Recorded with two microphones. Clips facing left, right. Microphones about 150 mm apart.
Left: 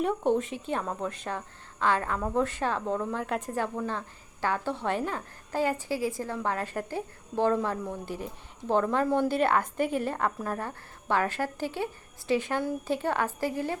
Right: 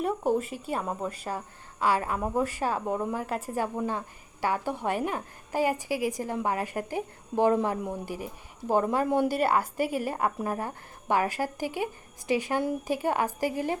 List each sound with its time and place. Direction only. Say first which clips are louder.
0.0 s a woman's voice: left 1 dB; 5° right (ahead or behind)